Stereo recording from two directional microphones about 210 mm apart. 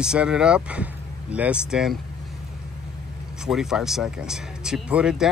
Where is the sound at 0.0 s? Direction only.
5° right (ahead or behind).